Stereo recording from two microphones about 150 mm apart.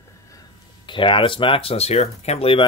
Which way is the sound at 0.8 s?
35° left (ahead or behind).